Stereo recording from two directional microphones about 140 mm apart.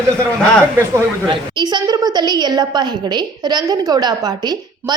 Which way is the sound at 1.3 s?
30° right (ahead or behind).